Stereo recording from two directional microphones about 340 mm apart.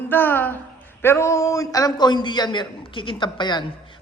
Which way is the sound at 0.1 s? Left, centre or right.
Centre.